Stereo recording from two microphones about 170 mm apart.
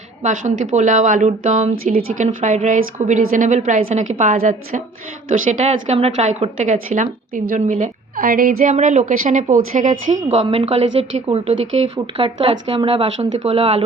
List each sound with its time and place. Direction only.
0.2 s a woman's voice: 45° right (ahead or behind)
8.7 s a woman's voice: 45° right (ahead or behind)
10.3 s a woman's voice: 30° right (ahead or behind)